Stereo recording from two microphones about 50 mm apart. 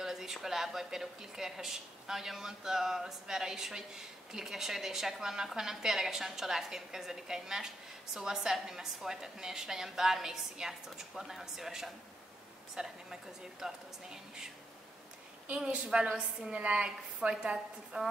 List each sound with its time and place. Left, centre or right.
0.0 s a woman's voice: centre
15.4 s a woman's voice: right